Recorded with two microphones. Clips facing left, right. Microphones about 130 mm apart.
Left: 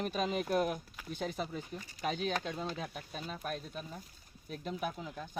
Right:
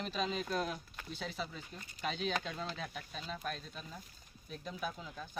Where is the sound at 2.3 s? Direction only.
10° left (ahead or behind).